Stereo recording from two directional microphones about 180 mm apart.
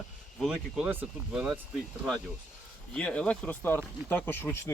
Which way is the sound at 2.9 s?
5° left (ahead or behind).